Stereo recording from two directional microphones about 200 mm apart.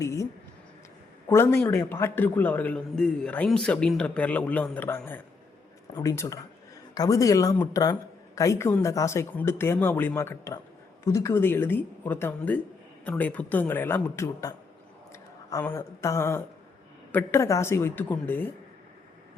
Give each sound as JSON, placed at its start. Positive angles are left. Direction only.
{"t": 0.0, "sound": "a man's voice", "side_deg": 15}
{"t": 1.3, "sound": "a man's voice", "side_deg": 10}